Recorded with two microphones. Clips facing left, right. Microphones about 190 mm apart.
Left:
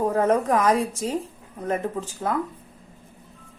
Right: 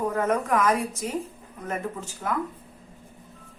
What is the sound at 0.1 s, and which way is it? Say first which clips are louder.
Speech: left 4 dB; 30° left (ahead or behind).